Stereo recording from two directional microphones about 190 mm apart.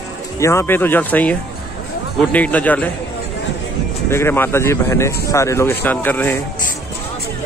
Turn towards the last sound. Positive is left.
turn(degrees=10)  # may be behind; listen again after turning